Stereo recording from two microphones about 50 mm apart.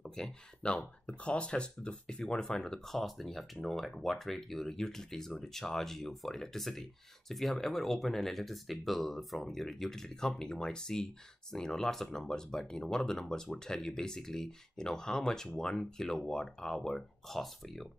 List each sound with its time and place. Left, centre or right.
0.0 s speech: centre
0.7 s speech: left; by 17.8 s centre